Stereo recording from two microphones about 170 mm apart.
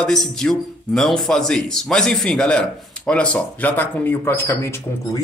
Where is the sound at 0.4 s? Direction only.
5° left (ahead or behind).